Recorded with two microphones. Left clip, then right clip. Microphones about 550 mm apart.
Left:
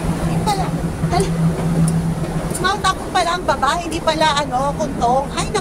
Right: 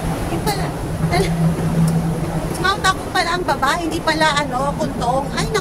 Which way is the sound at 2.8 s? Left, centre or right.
Right.